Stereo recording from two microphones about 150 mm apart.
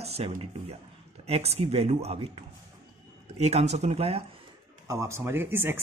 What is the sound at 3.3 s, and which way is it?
Speech, 45° right (ahead or behind).